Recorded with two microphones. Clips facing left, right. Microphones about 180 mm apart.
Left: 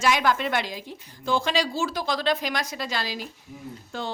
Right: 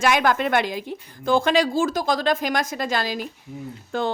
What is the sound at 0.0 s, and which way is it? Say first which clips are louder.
A woman's voice: right 3 dB; 55° right (ahead or behind).